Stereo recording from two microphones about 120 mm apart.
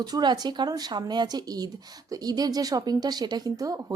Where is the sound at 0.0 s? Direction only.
35° right (ahead or behind).